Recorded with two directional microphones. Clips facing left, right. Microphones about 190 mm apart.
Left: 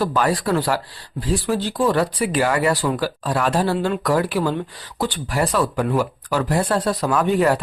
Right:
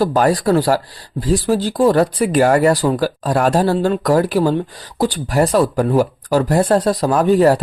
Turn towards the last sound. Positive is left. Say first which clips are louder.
# right 5 dB
turn(degrees=-40)  # may be behind; listen again after turning